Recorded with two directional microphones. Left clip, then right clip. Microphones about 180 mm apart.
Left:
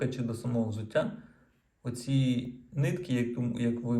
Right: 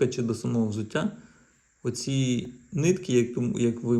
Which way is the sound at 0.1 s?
45° right (ahead or behind).